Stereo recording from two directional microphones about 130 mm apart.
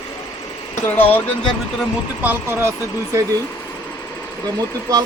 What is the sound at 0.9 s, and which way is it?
Speech, 15° left (ahead or behind).